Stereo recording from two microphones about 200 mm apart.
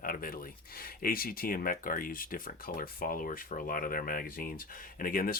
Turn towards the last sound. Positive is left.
turn(degrees=45)  # may be behind; listen again after turning